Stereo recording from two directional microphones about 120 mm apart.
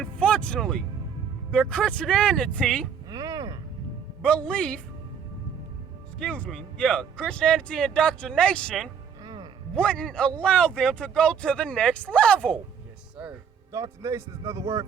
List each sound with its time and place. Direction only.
0.0 s a man's voice: 10° left (ahead or behind)
3.1 s music: 30° right (ahead or behind)
4.2 s a man's voice: 10° left (ahead or behind)
6.1 s a man's voice: 10° left (ahead or behind)
9.2 s music: 35° right (ahead or behind)
9.7 s a man's voice: 10° left (ahead or behind)
13.7 s a man's voice: 25° right (ahead or behind)